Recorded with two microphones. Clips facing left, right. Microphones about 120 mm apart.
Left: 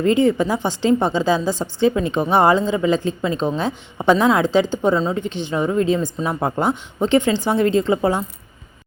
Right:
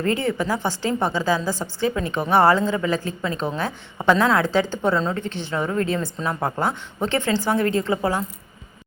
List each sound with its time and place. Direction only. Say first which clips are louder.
0.0 s a woman's voice: left 6 dB; 20° left (ahead or behind)